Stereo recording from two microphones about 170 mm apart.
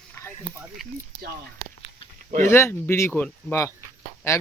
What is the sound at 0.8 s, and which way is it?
Speech, centre (ahead or behind).